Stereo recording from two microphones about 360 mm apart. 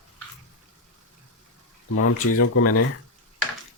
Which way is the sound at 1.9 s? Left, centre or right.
Left.